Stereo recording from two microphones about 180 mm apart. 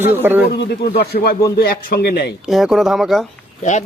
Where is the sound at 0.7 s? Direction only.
65° left (ahead or behind).